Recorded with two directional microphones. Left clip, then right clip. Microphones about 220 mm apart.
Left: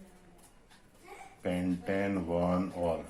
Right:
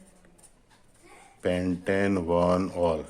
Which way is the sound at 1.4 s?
45° right (ahead or behind).